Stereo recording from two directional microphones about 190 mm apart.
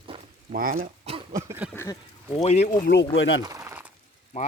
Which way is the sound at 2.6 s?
60° left (ahead or behind).